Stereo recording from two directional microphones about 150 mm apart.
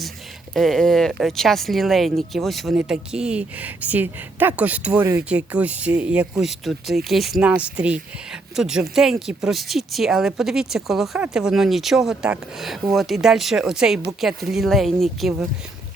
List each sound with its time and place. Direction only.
0.5 s speech: centre (ahead or behind)